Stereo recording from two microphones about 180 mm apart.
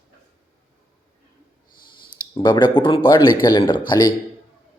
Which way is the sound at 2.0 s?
25° left (ahead or behind).